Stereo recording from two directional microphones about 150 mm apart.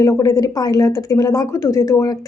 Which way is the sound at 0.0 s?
20° left (ahead or behind).